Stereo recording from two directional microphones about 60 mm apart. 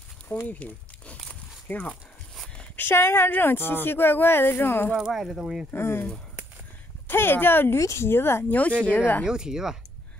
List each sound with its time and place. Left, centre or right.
0.5 s speech: left
4.9 s speech: centre
5.8 s speech: left
7.1 s speech: left
7.8 s speech: left
8.5 s speech: left
9.2 s speech: centre